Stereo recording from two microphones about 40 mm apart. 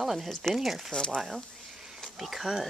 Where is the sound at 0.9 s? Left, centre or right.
Centre.